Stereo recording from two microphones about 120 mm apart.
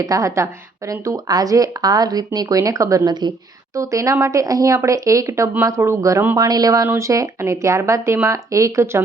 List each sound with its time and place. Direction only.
0.0 s speech: 30° right (ahead or behind)
3.8 s speech: 25° right (ahead or behind)